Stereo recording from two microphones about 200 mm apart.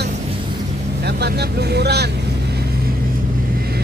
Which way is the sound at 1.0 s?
55° right (ahead or behind).